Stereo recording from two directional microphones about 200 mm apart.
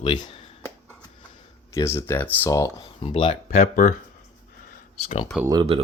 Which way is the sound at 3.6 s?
45° left (ahead or behind).